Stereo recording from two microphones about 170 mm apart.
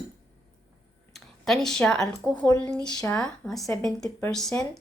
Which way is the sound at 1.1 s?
Centre (ahead or behind).